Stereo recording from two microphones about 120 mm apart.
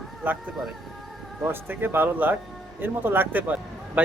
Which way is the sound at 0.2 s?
10° right (ahead or behind).